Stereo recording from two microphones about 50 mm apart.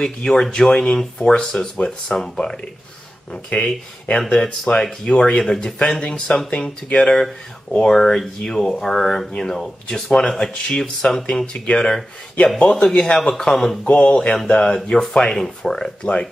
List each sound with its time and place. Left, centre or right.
0.0 s speech: centre
3.5 s speech: left
4.3 s speech: centre
12.5 s speech: left; by 13.7 s centre
13.8 s speech: left